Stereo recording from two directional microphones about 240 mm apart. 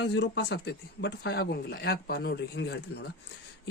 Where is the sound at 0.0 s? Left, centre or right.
Left.